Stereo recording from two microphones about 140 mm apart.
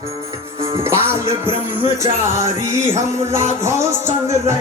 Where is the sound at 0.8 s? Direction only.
20° right (ahead or behind).